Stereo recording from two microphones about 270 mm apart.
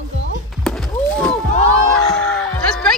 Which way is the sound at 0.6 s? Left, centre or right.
Centre.